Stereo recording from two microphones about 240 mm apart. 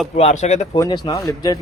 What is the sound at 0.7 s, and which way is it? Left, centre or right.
Speech, centre.